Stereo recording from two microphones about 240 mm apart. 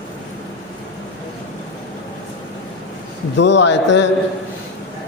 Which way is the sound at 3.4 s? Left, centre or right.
Left.